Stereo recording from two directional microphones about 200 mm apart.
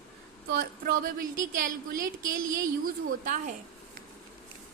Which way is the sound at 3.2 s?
40° right (ahead or behind).